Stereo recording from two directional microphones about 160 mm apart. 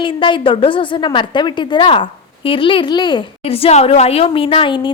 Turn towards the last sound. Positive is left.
turn(degrees=30)  # may be behind; listen again after turning